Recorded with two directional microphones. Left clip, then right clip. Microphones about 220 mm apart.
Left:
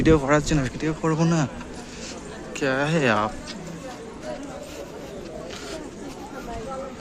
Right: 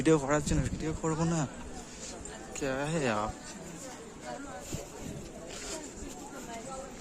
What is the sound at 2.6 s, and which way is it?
Speech, 5° right (ahead or behind).